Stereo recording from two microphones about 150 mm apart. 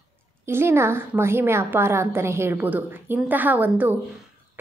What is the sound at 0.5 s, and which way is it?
A woman's voice, 15° right (ahead or behind).